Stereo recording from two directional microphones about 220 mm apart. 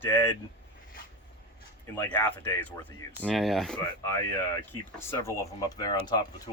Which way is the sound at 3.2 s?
Centre (ahead or behind).